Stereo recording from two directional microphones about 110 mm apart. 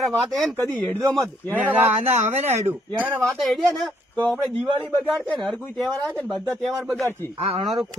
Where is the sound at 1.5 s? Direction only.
15° right (ahead or behind).